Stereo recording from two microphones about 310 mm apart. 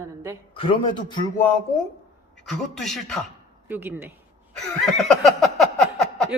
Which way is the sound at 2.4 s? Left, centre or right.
Centre.